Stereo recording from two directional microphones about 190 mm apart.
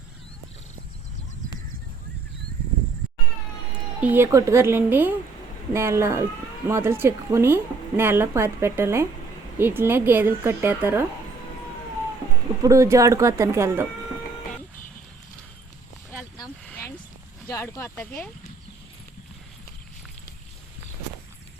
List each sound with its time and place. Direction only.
4.0 s speech: 10° right (ahead or behind)
12.6 s speech: 15° right (ahead or behind)
17.5 s speech: 15° left (ahead or behind)